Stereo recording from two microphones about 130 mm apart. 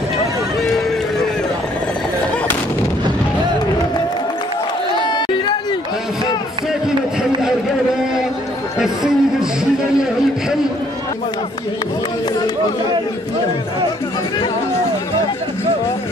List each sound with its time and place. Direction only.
4.9 s crowd: 35° left (ahead or behind)
8.7 s chatter: 5° right (ahead or behind)